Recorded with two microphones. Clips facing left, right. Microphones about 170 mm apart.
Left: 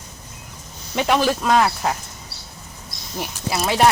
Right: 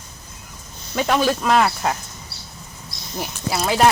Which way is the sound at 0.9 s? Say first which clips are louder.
Even; 5° left (ahead or behind).